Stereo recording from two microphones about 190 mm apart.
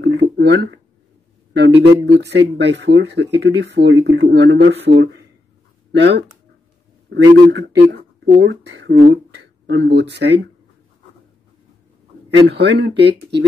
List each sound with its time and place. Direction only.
0.0 s a sound: 65° right (ahead or behind)
1.5 s speech: 65° right (ahead or behind)
12.3 s speech: 60° right (ahead or behind)